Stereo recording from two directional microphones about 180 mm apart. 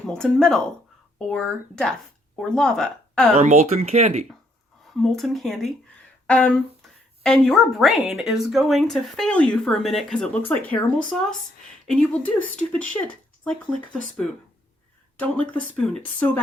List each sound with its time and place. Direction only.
0.0 s speech: 5° left (ahead or behind)
3.3 s speech: 40° right (ahead or behind)
4.9 s speech: centre (ahead or behind)